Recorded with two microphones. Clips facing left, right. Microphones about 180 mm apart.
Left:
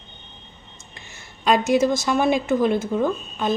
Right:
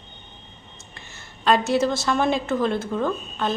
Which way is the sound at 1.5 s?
15° left (ahead or behind).